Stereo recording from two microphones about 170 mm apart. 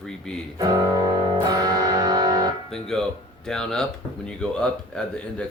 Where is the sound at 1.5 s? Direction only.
20° right (ahead or behind).